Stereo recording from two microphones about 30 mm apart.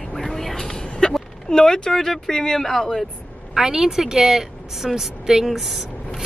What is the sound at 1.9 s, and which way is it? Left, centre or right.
Speech, centre.